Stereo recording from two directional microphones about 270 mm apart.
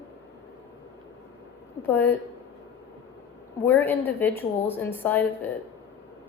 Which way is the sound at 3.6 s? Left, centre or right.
Centre.